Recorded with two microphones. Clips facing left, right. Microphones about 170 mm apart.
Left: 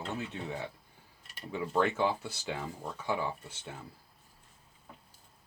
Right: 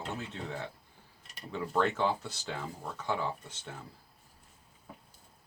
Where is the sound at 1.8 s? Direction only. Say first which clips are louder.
Even; 15° left (ahead or behind).